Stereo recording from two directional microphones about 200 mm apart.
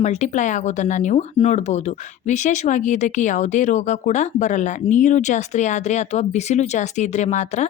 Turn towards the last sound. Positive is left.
turn(degrees=35)  # may be behind; listen again after turning